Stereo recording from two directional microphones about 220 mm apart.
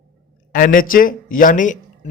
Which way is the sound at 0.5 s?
40° left (ahead or behind).